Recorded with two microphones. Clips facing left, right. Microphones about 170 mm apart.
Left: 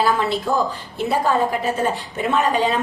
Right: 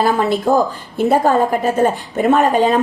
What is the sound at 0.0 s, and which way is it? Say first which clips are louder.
A woman's voice: right 4 dB; 50° right (ahead or behind).